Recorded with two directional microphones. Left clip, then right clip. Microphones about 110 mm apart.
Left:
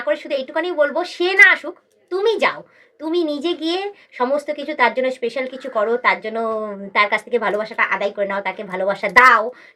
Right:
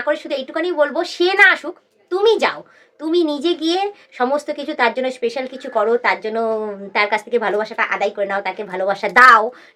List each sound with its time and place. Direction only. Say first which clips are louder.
0.1 s a woman's voice: left 1 dB; 45° right (ahead or behind)